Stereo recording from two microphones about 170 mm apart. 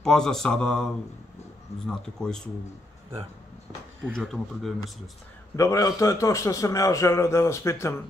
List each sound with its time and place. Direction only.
0.0 s mantra: 5° left (ahead or behind)
4.2 s mantra: centre (ahead or behind)
5.6 s a man's voice: 20° left (ahead or behind)